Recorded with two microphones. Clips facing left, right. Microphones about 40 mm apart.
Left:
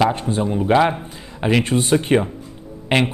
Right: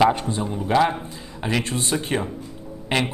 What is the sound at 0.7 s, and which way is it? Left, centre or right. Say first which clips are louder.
Speech: left 3 dB; left.